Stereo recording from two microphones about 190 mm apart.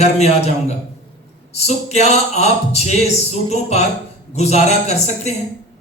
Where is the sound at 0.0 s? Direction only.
35° left (ahead or behind).